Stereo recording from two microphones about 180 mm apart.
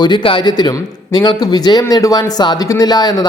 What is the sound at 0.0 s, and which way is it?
A man's voice, 25° left (ahead or behind).